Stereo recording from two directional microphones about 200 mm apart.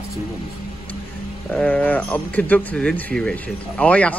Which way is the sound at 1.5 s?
10° left (ahead or behind).